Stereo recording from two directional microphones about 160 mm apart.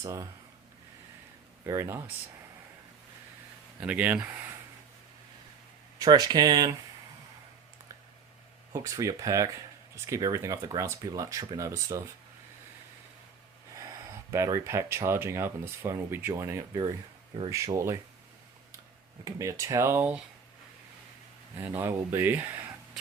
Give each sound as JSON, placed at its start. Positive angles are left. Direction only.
{"t": 0.0, "sound": "speech", "side_deg": -20}
{"t": 1.6, "sound": "speech", "side_deg": -15}
{"t": 3.8, "sound": "speech", "side_deg": -10}
{"t": 6.0, "sound": "speech", "side_deg": -25}
{"t": 8.7, "sound": "speech", "side_deg": -20}
{"t": 13.7, "sound": "speech", "side_deg": -20}
{"t": 19.2, "sound": "speech", "side_deg": -20}
{"t": 21.6, "sound": "speech", "side_deg": -15}